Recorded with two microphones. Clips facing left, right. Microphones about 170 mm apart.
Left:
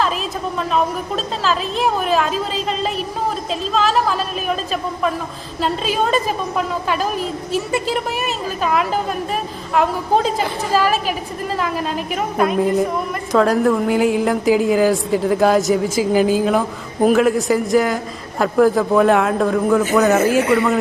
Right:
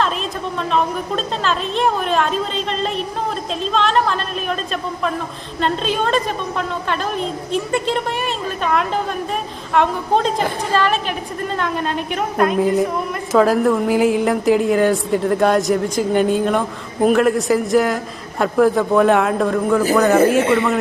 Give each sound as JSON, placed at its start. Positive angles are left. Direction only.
{"t": 0.0, "sound": "a woman's voice", "side_deg": 5}
{"t": 20.4, "sound": "speech", "side_deg": -25}